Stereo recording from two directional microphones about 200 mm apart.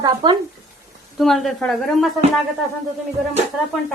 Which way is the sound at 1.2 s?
Centre (ahead or behind).